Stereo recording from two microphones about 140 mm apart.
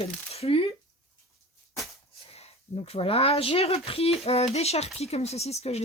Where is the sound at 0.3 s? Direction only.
45° left (ahead or behind).